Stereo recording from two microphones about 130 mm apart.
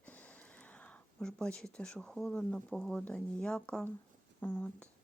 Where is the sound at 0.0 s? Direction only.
10° left (ahead or behind).